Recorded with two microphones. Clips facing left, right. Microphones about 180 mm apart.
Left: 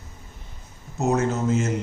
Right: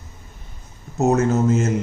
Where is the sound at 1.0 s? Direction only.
45° right (ahead or behind).